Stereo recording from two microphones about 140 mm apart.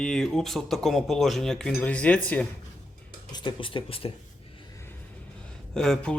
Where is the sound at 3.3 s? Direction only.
35° left (ahead or behind).